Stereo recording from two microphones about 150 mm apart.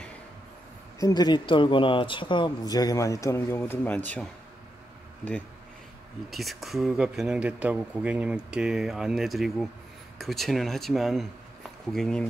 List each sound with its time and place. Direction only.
0.9 s speech: 25° left (ahead or behind); by 4.3 s 10° left (ahead or behind)
6.3 s speech: centre (ahead or behind)